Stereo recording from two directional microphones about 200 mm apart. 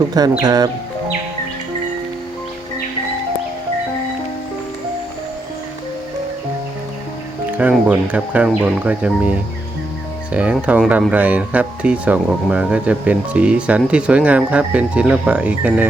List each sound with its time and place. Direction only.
0.4 s speech: 20° right (ahead or behind)
7.5 s speech: 5° right (ahead or behind)